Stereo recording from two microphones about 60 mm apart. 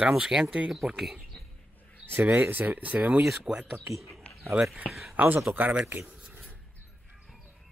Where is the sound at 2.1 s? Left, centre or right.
Right.